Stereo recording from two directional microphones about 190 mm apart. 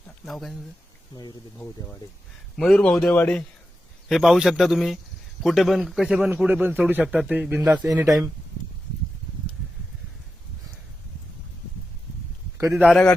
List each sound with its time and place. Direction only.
0.3 s a man's voice: centre (ahead or behind)
1.1 s speech: 20° left (ahead or behind)
2.6 s a man's voice: centre (ahead or behind); by 8.3 s 15° right (ahead or behind)
12.5 s a man's voice: 15° right (ahead or behind)
12.8 s a man's voice: 5° left (ahead or behind)